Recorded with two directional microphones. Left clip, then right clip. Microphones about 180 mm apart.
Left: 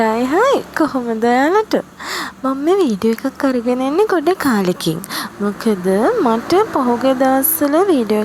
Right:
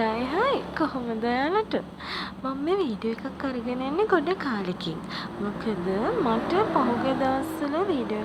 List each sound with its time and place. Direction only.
0.0 s speech: 55° left (ahead or behind)
5.6 s speech: 50° left (ahead or behind)